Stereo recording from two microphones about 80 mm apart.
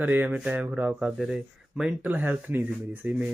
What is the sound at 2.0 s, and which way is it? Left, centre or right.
Speech, right.